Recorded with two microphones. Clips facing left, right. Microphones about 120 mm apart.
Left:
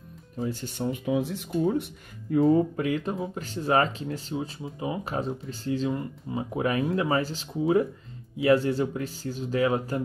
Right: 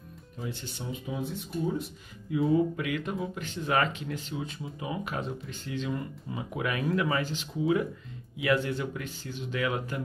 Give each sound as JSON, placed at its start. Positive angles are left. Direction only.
{"t": 0.4, "sound": "speech", "side_deg": 40}
{"t": 2.3, "sound": "speech", "side_deg": 40}